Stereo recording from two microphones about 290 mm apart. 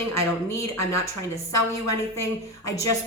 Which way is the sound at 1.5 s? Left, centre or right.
Left.